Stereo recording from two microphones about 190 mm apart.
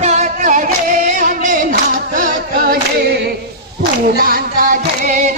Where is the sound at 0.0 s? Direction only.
35° right (ahead or behind); by 3.2 s 55° right (ahead or behind).